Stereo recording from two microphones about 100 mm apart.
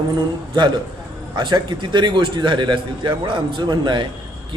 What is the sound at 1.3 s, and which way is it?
A man's voice, 50° right (ahead or behind).